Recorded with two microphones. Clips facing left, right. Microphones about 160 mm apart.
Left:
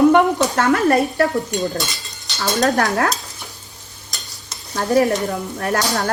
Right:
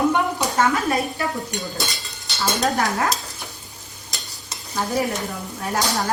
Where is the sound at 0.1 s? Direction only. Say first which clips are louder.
Left 7 dB; 65° left (ahead or behind).